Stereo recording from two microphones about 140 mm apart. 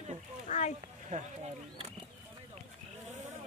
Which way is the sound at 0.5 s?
65° left (ahead or behind).